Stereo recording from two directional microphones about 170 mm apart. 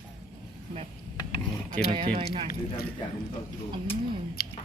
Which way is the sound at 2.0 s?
40° right (ahead or behind).